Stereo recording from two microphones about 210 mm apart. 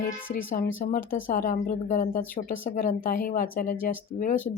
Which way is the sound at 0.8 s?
40° left (ahead or behind).